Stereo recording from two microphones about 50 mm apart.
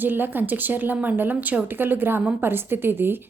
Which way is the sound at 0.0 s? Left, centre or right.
Right.